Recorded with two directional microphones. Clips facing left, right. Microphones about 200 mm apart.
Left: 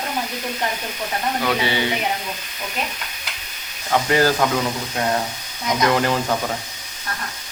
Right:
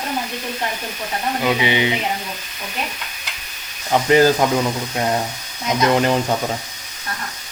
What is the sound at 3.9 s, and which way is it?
Speech, 20° right (ahead or behind).